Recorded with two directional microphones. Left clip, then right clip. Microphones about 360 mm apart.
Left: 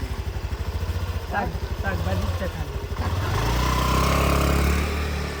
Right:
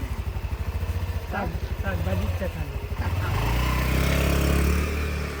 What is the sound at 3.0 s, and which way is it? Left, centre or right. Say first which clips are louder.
Vehicle: left 3 dB; left.